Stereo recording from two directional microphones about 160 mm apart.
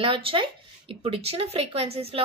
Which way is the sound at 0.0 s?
35° right (ahead or behind).